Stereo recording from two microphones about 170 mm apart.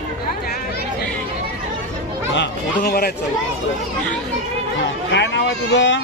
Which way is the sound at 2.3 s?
65° left (ahead or behind).